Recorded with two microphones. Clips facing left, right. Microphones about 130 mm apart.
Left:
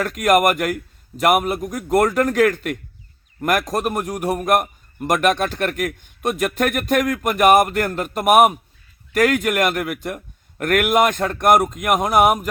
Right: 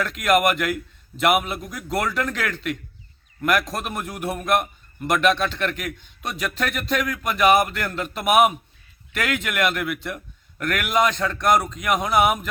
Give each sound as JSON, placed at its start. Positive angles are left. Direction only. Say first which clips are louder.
{"t": 0.0, "sound": "a man's voice", "louder": "left 3 dB", "side_deg": 45}